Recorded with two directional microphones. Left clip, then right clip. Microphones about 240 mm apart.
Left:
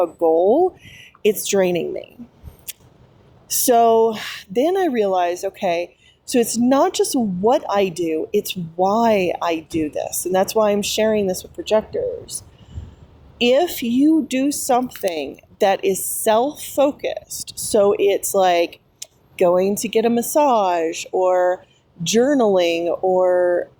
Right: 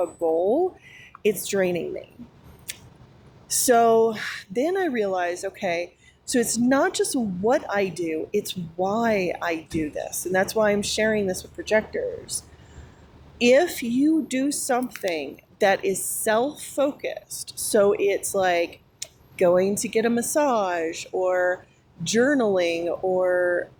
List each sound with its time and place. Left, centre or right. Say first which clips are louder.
0.0 s speech: left 7 dB; left
2.7 s a sound: even; left
3.5 s speech: left 4 dB; left